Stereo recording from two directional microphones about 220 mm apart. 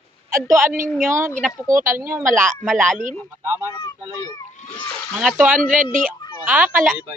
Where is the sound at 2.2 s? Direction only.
35° right (ahead or behind).